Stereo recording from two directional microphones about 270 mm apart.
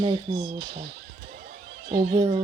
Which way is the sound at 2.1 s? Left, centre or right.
Centre.